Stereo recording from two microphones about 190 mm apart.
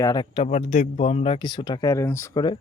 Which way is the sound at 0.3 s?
35° left (ahead or behind).